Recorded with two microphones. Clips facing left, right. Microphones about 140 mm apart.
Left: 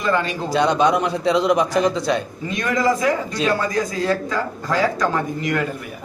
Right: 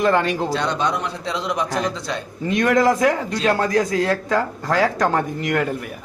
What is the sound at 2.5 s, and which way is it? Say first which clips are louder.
A man's voice: right 3 dB; 65° right (ahead or behind).